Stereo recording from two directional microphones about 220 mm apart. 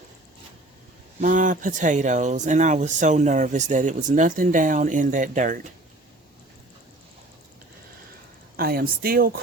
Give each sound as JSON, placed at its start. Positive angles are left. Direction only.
{"t": 1.2, "sound": "speech", "side_deg": -35}
{"t": 8.5, "sound": "speech", "side_deg": -45}